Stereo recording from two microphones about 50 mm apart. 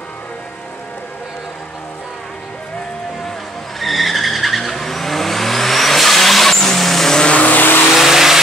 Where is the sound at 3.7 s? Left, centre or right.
Centre.